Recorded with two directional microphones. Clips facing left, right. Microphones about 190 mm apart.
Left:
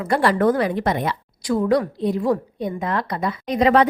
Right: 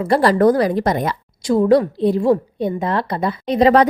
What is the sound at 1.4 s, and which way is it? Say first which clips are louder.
A woman's voice: right 5 dB; 30° right (ahead or behind).